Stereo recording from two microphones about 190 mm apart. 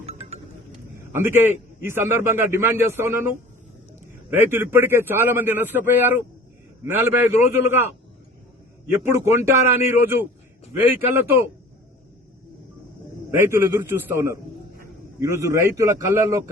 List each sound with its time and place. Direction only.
0.0 s a sound: 30° right (ahead or behind)
1.8 s a man's voice: 10° right (ahead or behind)
8.9 s a man's voice: 15° right (ahead or behind)
13.5 s a man's voice: 10° right (ahead or behind)